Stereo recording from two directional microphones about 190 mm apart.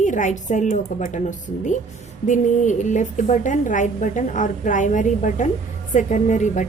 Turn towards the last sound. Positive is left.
turn(degrees=40)  # may be behind; listen again after turning